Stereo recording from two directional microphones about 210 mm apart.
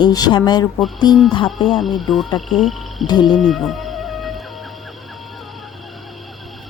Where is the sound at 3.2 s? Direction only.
Centre (ahead or behind).